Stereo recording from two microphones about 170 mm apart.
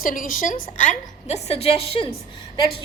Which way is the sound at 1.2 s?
40° left (ahead or behind).